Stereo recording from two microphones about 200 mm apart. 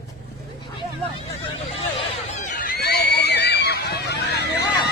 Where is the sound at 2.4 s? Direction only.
45° left (ahead or behind).